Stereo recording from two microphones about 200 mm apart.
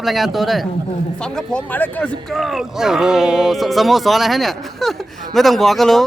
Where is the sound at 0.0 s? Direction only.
Centre (ahead or behind).